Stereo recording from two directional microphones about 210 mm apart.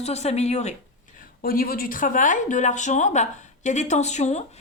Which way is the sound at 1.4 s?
45° left (ahead or behind).